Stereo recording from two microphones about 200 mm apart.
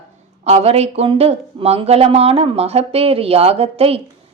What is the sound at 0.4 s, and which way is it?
Speech, 30° right (ahead or behind).